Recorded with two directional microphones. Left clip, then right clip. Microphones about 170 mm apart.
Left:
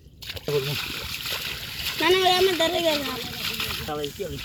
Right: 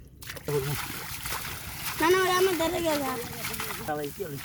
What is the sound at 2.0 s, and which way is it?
Speech, 65° right (ahead or behind).